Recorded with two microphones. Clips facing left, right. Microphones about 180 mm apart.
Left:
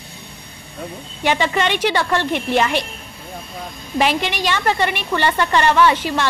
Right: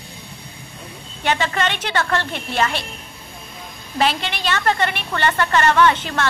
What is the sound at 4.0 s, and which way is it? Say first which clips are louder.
A woman's voice: left 2 dB; 15° left (ahead or behind).